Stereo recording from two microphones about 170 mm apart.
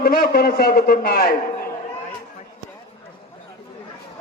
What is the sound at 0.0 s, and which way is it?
A man's voice, 65° left (ahead or behind).